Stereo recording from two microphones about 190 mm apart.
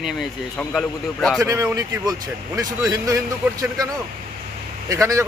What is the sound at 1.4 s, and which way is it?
A man's voice, 15° right (ahead or behind).